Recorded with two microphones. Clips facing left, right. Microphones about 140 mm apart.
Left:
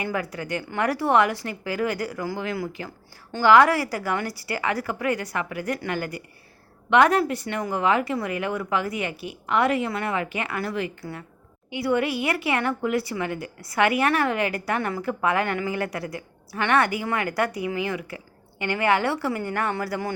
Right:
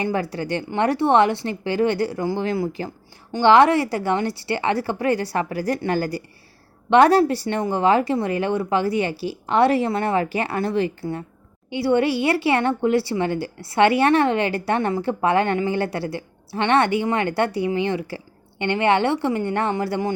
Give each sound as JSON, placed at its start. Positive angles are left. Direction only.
{"t": 0.0, "sound": "speech", "side_deg": -30}